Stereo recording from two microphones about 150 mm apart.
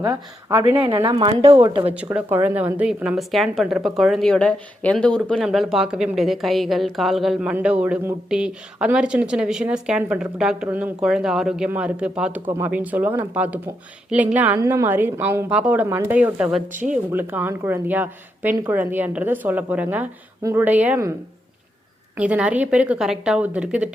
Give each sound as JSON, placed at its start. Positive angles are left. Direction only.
{"t": 0.0, "sound": "speech", "side_deg": -20}
{"t": 1.0, "sound": "speech", "side_deg": -35}
{"t": 2.1, "sound": "a woman's voice", "side_deg": -15}
{"t": 18.5, "sound": "speech", "side_deg": -25}
{"t": 18.8, "sound": "a woman's voice", "side_deg": -10}
{"t": 22.1, "sound": "a woman's voice", "side_deg": -10}